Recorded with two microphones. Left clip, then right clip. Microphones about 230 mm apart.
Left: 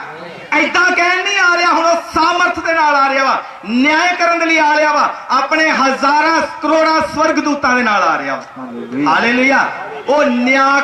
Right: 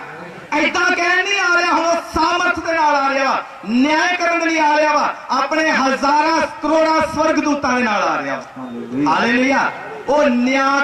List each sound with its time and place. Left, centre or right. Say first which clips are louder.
0.7 s a man's voice: left 4 dB; centre